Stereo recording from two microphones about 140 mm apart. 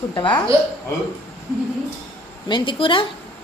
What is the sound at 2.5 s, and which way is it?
Speech, 35° left (ahead or behind).